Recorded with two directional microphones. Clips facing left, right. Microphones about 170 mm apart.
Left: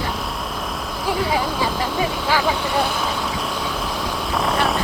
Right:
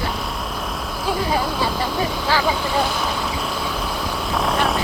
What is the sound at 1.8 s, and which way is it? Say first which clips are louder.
Speech: even; centre (ahead or behind).